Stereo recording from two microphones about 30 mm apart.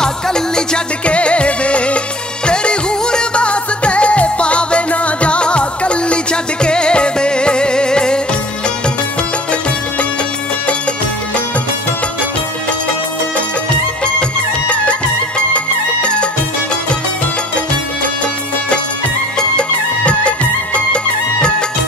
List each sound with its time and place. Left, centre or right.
0.0 s music: left
1.0 s music: left
14.7 s music: left
18.0 s music: left
20.0 s music: left